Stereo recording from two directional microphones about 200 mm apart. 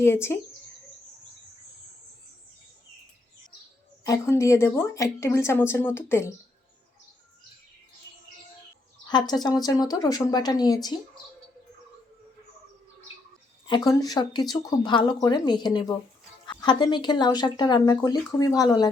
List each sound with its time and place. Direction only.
0.0 s speech: 10° left (ahead or behind)
4.0 s speech: 15° left (ahead or behind)
9.0 s speech: 20° left (ahead or behind)
13.7 s speech: 20° left (ahead or behind)